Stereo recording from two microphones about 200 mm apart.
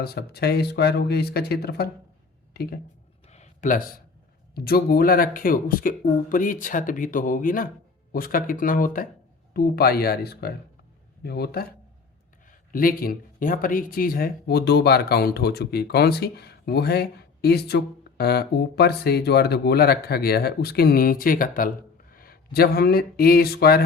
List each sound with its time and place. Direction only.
0.0 s speech: 50° left (ahead or behind)
3.2 s a sound: 35° left (ahead or behind)
4.5 s speech: 50° left (ahead or behind)